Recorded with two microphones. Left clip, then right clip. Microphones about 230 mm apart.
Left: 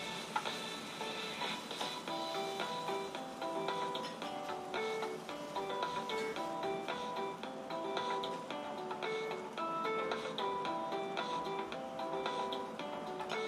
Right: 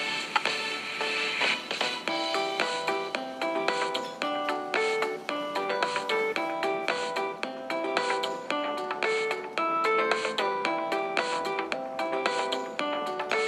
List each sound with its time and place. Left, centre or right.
9.8 s music: right